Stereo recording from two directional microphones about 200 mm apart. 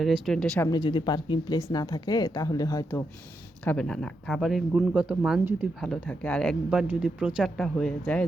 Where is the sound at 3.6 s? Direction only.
5° left (ahead or behind).